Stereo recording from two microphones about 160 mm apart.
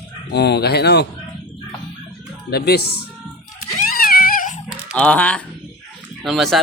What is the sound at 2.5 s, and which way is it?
Speech, 85° left.